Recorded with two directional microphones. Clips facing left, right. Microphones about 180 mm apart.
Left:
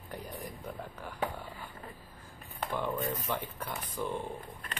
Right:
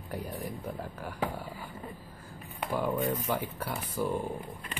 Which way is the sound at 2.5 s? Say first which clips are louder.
Right 4 dB; 10° right (ahead or behind).